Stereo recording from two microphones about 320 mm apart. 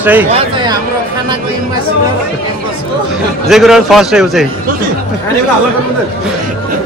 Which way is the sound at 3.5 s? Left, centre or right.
Centre.